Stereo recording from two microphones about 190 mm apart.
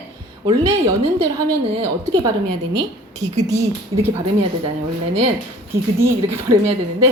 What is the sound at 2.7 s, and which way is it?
A woman's voice, 20° right (ahead or behind).